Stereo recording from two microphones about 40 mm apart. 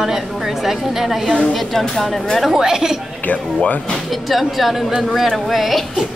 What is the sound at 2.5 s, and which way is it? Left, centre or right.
Speech, centre.